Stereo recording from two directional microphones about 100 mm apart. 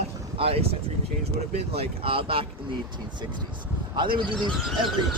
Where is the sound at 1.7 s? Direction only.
65° right (ahead or behind).